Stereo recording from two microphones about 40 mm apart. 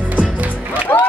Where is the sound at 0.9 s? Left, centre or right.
Left.